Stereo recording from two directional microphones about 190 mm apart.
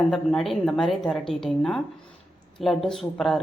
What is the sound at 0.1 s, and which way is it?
Speech, centre (ahead or behind).